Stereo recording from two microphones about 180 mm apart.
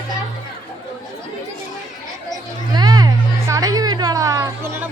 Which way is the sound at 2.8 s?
20° right (ahead or behind).